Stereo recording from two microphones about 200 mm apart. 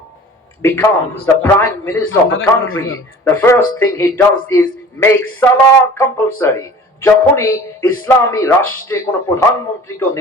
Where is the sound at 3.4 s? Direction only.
15° left (ahead or behind).